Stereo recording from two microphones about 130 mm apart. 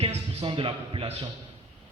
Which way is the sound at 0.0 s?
50° right (ahead or behind).